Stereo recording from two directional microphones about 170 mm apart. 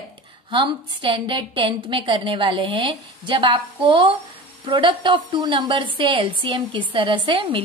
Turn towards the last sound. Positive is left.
turn(degrees=-30)  # may be behind; listen again after turning